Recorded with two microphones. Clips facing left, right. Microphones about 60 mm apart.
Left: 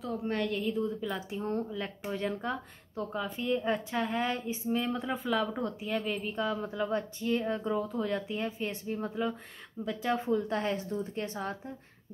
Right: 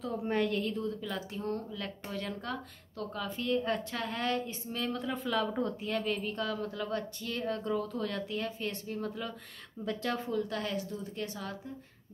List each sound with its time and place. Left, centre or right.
0.0 s a woman's voice: centre
5.2 s speech: centre; by 11.7 s left